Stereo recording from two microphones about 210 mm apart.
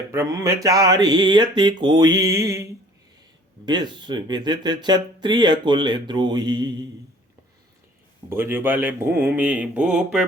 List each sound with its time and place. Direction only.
0.1 s mantra: 15° right (ahead or behind)
3.7 s speech: 20° right (ahead or behind)
8.3 s mantra: 10° right (ahead or behind)